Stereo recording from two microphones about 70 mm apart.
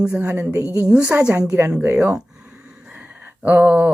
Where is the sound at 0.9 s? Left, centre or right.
Centre.